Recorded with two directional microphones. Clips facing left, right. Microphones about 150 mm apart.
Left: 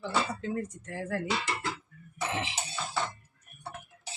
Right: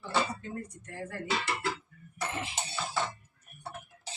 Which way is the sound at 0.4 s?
90° left.